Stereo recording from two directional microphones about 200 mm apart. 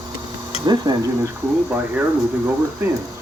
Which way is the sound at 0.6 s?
20° right (ahead or behind).